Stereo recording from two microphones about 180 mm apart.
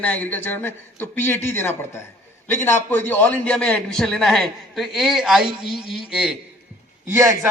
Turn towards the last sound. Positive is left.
turn(degrees=-15)  # may be behind; listen again after turning